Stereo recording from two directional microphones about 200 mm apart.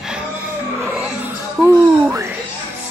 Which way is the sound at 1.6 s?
15° right (ahead or behind).